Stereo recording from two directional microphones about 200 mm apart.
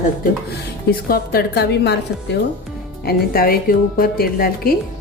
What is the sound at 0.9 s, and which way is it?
A woman's voice, 50° left (ahead or behind).